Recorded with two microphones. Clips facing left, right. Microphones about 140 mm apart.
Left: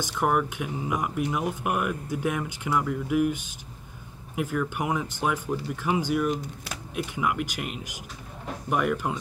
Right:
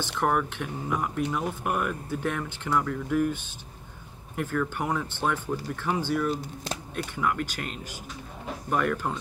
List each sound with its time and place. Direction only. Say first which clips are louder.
0.0 s speech: left 1 dB; 10° left (ahead or behind)
6.3 s speech: even; 25° right (ahead or behind)
7.2 s speech: even; 10° left (ahead or behind)